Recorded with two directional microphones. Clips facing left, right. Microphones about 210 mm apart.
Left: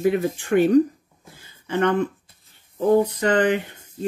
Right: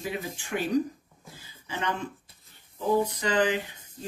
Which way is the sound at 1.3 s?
60° left (ahead or behind).